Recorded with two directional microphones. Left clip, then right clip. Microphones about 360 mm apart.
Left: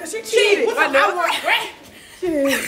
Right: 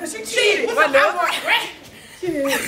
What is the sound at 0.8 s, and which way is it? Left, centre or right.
Speech, centre.